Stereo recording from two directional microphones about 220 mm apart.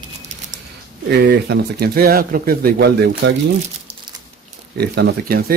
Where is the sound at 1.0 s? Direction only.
50° right (ahead or behind).